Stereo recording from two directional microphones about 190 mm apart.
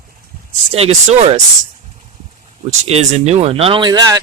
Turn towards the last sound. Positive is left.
turn(degrees=-20)  # may be behind; listen again after turning